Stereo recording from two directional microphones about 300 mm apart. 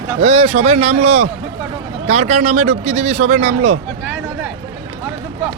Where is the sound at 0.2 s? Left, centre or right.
Centre.